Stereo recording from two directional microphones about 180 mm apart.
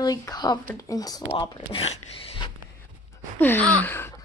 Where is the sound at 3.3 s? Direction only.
10° left (ahead or behind).